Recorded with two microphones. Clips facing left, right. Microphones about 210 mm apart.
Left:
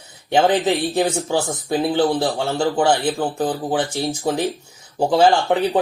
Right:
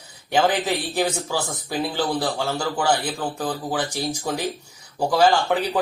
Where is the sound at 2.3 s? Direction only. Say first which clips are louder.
Left 5 dB; 30° left (ahead or behind).